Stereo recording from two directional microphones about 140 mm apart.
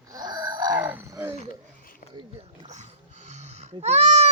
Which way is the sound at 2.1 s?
45° right (ahead or behind).